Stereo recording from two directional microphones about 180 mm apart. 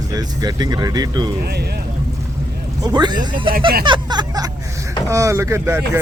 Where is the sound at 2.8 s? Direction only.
25° right (ahead or behind).